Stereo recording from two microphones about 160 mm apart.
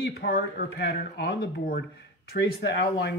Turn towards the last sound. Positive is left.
turn(degrees=90)